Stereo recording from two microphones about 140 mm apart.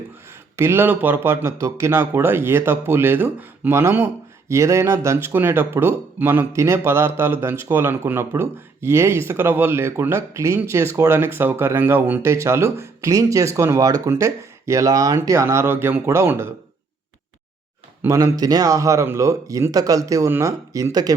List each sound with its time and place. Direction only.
0.5 s speech: 15° right (ahead or behind)
18.0 s speech: 20° right (ahead or behind)